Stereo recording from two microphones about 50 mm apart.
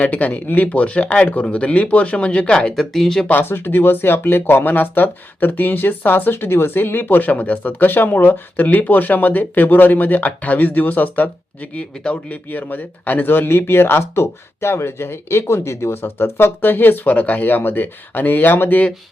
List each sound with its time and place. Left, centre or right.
0.0 s speech: left
2.7 s speech: centre
3.4 s speech: left
12.5 s speech: left